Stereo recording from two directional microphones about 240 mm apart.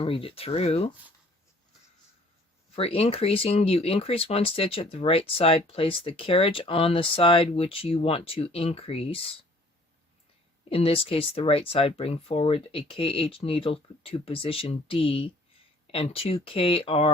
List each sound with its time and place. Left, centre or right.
0.0 s speech: left
2.7 s speech: left
10.7 s speech: left